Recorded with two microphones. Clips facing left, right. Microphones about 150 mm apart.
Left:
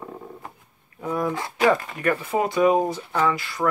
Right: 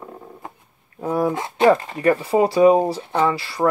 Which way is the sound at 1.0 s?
30° right (ahead or behind).